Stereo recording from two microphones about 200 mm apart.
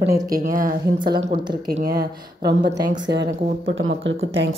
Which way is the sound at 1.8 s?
50° right (ahead or behind).